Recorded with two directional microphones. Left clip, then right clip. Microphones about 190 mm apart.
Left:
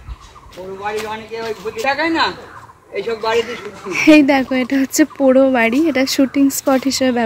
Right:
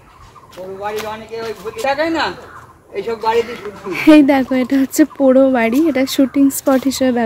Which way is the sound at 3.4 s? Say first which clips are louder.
Right 1 dB; 15° right (ahead or behind).